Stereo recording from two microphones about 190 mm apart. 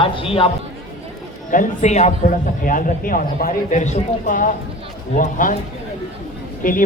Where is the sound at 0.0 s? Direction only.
30° left (ahead or behind).